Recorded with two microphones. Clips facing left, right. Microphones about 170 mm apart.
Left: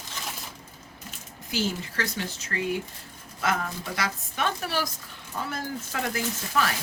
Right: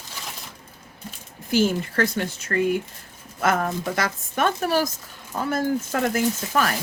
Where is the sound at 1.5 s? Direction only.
55° right (ahead or behind).